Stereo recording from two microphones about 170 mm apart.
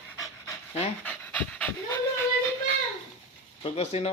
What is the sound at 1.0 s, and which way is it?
Dog, 10° left (ahead or behind).